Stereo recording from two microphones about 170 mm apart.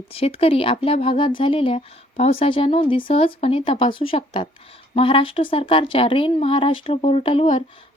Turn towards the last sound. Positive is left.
turn(degrees=35)  # may be behind; listen again after turning